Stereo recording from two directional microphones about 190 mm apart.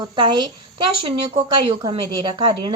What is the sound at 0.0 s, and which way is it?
Speech, 25° right (ahead or behind).